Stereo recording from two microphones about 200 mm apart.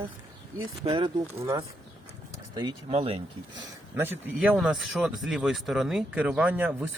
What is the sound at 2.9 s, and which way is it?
Speech, 30° right (ahead or behind).